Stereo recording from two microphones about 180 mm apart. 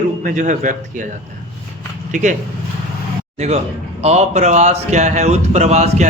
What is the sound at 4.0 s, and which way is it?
A man's voice, 35° right (ahead or behind).